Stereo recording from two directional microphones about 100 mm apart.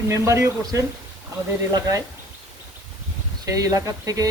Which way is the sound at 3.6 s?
35° right (ahead or behind).